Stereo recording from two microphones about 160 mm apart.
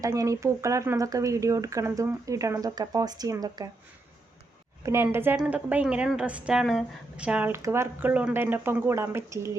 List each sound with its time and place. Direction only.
0.0 s speech: 20° right (ahead or behind)
4.8 s a woman's voice: 15° right (ahead or behind)